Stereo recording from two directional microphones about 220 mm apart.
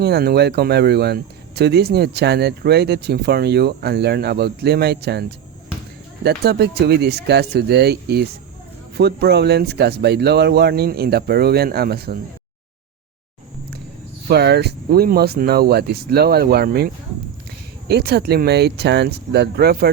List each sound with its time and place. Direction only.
0.0 s speech: 45° right (ahead or behind)
6.2 s speech: 45° right (ahead or behind)
14.3 s speech: 50° right (ahead or behind)